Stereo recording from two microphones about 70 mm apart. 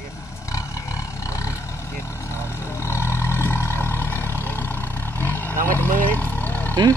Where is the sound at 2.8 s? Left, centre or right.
Left.